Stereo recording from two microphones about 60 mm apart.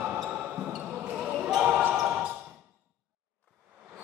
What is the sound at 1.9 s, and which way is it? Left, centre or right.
Basketball bounce, centre.